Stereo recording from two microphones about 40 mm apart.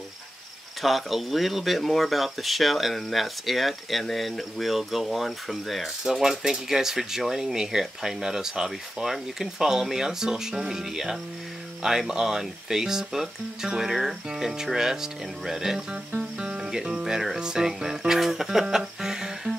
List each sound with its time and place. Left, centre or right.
0.8 s speech: centre
16.3 s speech: right
18.2 s music: centre